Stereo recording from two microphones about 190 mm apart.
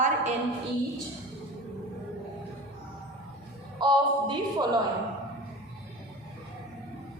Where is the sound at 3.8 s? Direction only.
25° right (ahead or behind).